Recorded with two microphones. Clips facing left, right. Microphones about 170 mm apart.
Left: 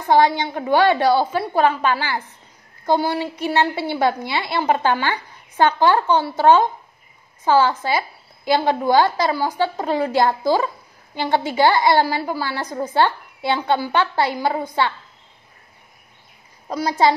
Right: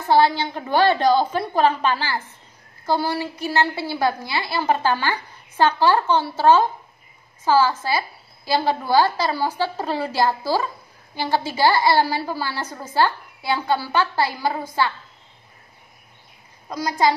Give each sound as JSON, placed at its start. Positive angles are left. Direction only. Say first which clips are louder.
{"t": 0.1, "sound": "a woman's voice", "louder": "left 1 dB", "side_deg": 15}
{"t": 2.9, "sound": "a woman's voice", "louder": "left 3 dB", "side_deg": 20}
{"t": 16.6, "sound": "a woman's voice", "louder": "left 3 dB", "side_deg": 25}